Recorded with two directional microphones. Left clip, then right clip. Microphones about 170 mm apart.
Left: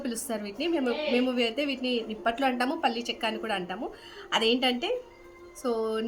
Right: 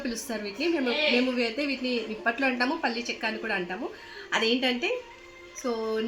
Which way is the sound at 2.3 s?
25° left (ahead or behind).